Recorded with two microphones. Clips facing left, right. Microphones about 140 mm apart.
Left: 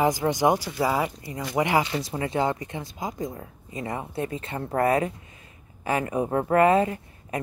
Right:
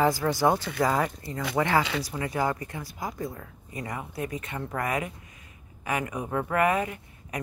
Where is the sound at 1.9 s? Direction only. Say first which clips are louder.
Left 3 dB; 30° left (ahead or behind).